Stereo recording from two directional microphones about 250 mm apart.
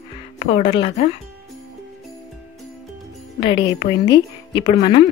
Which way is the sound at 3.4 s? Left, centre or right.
Centre.